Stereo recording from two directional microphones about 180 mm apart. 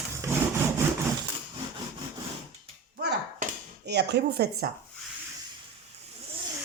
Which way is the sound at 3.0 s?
60° right (ahead or behind).